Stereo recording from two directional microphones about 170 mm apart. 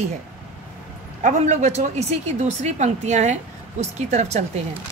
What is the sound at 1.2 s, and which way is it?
A woman's voice, 45° right (ahead or behind).